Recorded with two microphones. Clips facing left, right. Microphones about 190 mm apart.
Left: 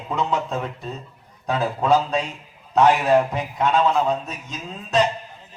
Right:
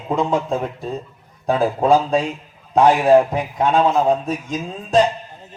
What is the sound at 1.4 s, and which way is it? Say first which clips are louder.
A man's voice: right 5 dB; 30° right (ahead or behind).